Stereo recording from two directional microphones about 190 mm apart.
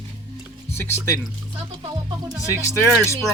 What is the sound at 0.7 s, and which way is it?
Speech, 15° left (ahead or behind).